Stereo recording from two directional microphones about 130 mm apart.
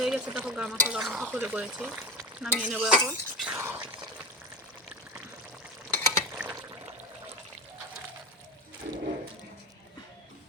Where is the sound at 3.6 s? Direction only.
20° right (ahead or behind).